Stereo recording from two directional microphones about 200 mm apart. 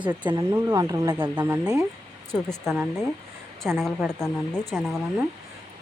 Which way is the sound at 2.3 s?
Centre (ahead or behind).